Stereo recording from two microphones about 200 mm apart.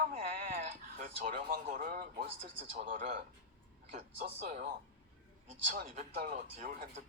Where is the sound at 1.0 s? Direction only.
45° right (ahead or behind).